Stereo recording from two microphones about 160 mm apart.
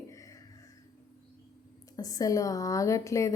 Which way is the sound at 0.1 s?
20° left (ahead or behind).